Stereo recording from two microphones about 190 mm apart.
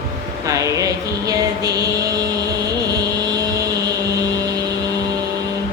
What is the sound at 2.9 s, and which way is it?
Vehicle, 20° right (ahead or behind).